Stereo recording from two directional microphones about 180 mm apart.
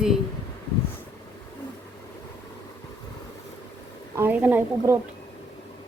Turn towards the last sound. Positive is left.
turn(degrees=-10)  # may be behind; listen again after turning